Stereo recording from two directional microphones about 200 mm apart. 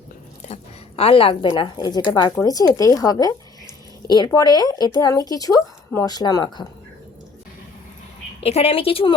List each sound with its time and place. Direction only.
0.4 s a woman's voice: 30° left (ahead or behind)
8.4 s a woman's voice: 30° left (ahead or behind)